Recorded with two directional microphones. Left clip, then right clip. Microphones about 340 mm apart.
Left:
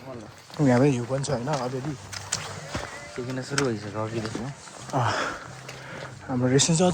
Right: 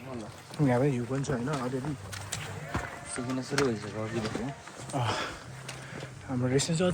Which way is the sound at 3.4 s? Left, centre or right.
Left.